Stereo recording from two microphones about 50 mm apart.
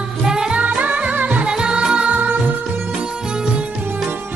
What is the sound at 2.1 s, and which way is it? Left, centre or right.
Music, right.